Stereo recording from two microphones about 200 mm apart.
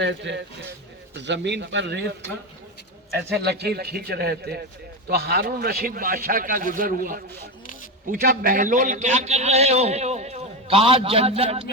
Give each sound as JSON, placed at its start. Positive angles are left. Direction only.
{"t": 0.0, "sound": "a man's voice", "side_deg": -60}
{"t": 3.4, "sound": "a man's voice", "side_deg": -55}